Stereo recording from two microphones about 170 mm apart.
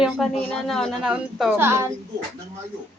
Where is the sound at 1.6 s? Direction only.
15° right (ahead or behind).